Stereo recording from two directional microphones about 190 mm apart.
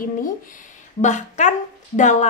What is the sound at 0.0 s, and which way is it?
A woman's voice, 45° left (ahead or behind).